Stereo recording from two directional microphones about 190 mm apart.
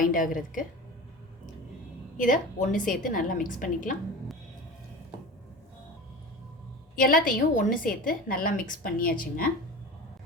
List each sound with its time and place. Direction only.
0.0 s a woman's voice: 45° left (ahead or behind)
2.1 s a woman's voice: 45° left (ahead or behind)
6.9 s a woman's voice: 45° left (ahead or behind)